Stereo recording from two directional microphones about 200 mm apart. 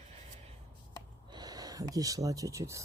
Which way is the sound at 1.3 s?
20° right (ahead or behind).